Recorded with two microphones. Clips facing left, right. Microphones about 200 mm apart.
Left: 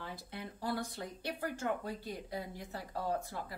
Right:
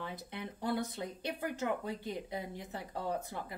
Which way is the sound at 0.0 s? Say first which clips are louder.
Right 2 dB; 20° right (ahead or behind).